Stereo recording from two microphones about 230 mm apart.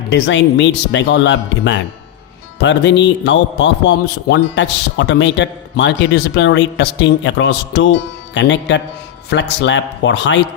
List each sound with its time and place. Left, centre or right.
0.1 s a man's voice: left